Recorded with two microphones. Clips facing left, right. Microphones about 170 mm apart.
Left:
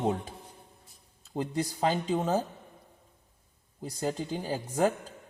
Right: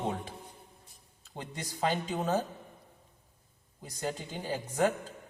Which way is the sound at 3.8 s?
30° left (ahead or behind).